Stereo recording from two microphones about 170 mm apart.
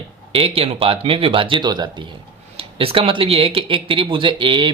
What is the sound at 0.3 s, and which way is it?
Speech, 35° right (ahead or behind).